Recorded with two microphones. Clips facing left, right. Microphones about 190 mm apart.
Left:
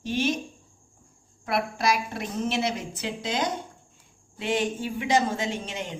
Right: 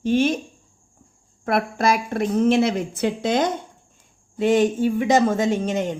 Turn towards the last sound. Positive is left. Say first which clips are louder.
# right 10 dB
turn(degrees=-45)  # may be behind; listen again after turning